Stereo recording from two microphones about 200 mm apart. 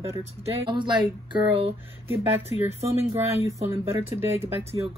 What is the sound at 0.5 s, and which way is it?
Speech, 25° right (ahead or behind).